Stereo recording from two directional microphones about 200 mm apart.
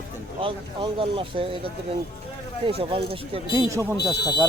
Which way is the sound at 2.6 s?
30° right (ahead or behind).